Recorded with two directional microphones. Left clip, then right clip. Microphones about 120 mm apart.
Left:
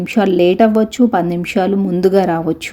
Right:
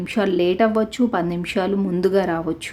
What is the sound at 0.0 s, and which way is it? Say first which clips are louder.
Speech: left 7 dB; 30° left (ahead or behind).